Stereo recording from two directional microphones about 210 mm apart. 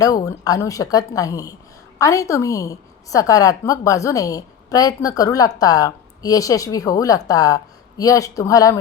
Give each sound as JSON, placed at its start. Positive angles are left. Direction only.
{"t": 0.0, "sound": "a woman's voice", "side_deg": 15}